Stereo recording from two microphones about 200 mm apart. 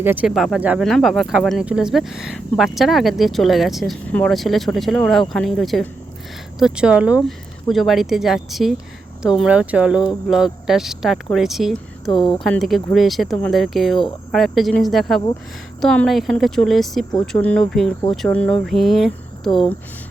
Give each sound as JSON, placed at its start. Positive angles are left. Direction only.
{"t": 0.0, "sound": "speech", "side_deg": -10}
{"t": 12.1, "sound": "speech", "side_deg": 25}
{"t": 12.4, "sound": "speech", "side_deg": 0}
{"t": 19.5, "sound": "speech", "side_deg": 25}